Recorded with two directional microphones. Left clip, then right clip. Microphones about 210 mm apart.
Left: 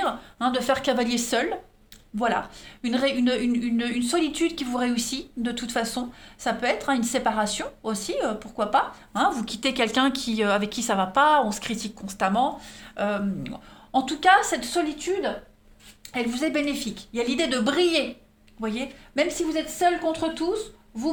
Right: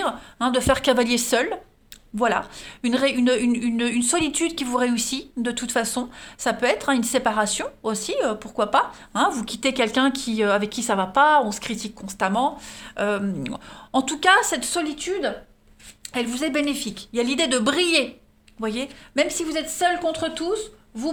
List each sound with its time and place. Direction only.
0.0 s a woman's voice: 35° right (ahead or behind)